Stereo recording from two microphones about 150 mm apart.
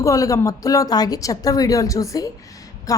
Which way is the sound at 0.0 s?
20° left (ahead or behind).